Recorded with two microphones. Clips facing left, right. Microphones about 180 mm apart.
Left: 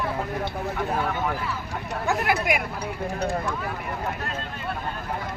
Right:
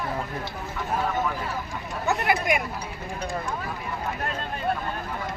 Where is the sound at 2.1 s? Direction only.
Centre (ahead or behind).